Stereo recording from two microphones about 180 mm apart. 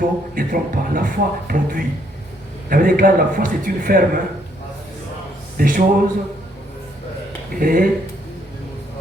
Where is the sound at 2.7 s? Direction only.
50° right (ahead or behind).